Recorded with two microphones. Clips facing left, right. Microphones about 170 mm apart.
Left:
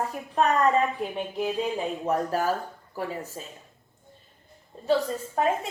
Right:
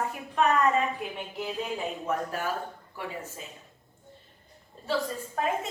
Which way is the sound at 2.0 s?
40° left (ahead or behind).